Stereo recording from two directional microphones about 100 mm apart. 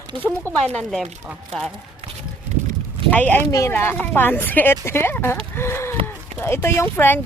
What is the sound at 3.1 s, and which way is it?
Speech, 15° left (ahead or behind).